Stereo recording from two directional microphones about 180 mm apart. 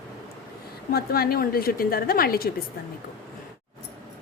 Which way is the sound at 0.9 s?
55° left (ahead or behind).